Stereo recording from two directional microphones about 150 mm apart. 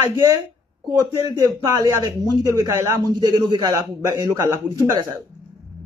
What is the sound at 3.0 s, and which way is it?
A man's voice, 30° right (ahead or behind).